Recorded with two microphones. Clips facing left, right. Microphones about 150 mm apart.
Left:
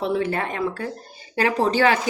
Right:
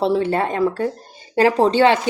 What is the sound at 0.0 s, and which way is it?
A woman's voice, 30° right (ahead or behind).